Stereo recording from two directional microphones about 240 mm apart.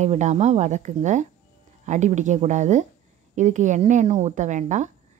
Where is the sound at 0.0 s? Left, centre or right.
Right.